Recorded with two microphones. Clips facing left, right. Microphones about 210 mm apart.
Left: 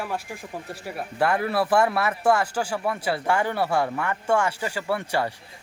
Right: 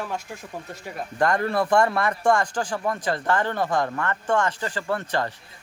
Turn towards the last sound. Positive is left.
turn(degrees=10)  # may be behind; listen again after turning